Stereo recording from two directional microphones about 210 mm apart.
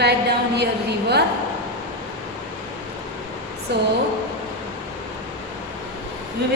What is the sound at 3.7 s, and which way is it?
Speech, 50° right (ahead or behind).